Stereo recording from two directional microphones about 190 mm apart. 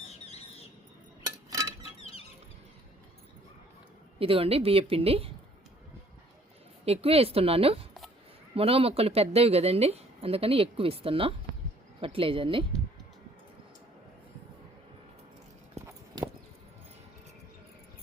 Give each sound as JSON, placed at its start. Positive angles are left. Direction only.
{"t": 1.5, "sound": "a sound", "side_deg": -15}
{"t": 4.2, "sound": "speech", "side_deg": -30}
{"t": 6.8, "sound": "speech", "side_deg": -30}